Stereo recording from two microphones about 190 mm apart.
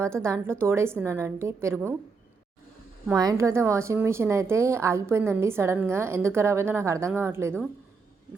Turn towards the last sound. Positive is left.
turn(degrees=-10)  # may be behind; listen again after turning